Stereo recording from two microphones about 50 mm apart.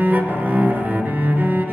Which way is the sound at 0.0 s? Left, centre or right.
Right.